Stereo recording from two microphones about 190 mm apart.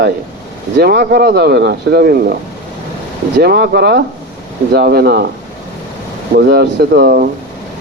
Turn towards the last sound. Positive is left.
turn(degrees=-55)  # may be behind; listen again after turning